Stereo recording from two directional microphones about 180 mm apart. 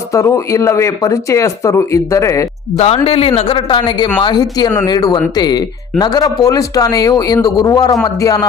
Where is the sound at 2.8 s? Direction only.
35° left (ahead or behind).